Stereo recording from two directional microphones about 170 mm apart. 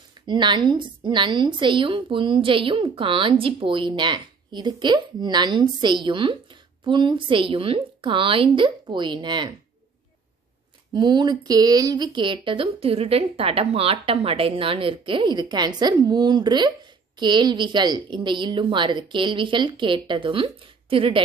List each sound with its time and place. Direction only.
0.3 s speech: 25° right (ahead or behind)
10.9 s speech: 25° right (ahead or behind)